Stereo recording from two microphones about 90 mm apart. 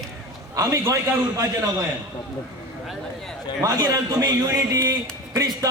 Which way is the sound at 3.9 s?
40° right (ahead or behind).